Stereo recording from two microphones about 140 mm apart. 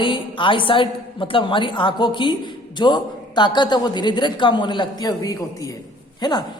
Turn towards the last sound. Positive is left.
turn(degrees=30)  # may be behind; listen again after turning